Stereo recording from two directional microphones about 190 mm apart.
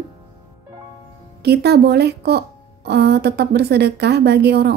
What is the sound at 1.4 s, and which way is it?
A woman's voice, 60° right (ahead or behind).